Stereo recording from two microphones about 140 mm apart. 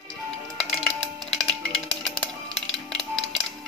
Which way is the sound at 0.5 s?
5° left (ahead or behind).